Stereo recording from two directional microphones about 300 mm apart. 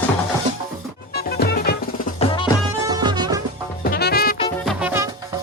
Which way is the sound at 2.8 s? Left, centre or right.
Centre.